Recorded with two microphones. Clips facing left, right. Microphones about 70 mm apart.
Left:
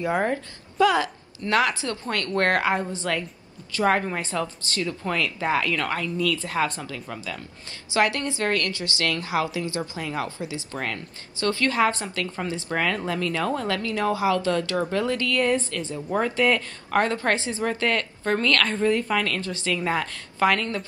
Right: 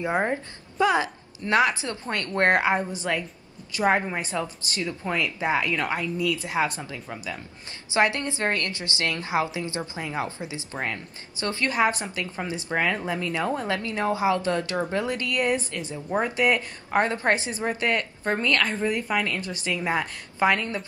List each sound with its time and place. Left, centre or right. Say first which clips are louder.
0.0 s a woman's voice: left 1 dB; right